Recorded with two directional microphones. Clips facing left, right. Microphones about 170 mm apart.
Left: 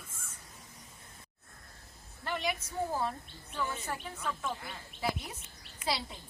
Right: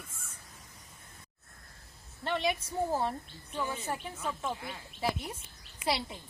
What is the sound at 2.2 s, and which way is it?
Speech, 25° right (ahead or behind).